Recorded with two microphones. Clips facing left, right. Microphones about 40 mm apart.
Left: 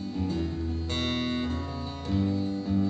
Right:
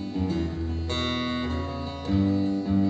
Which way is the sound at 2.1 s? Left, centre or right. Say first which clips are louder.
Right 5 dB; centre.